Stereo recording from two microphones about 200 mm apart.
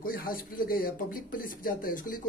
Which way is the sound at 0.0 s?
45° left (ahead or behind).